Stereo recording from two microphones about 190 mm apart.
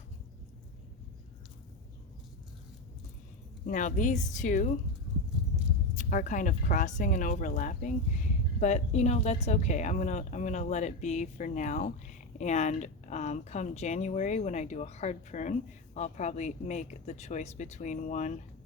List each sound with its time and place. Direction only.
3.7 s a woman's voice: 40° left (ahead or behind)
6.0 s a woman's voice: 40° left (ahead or behind)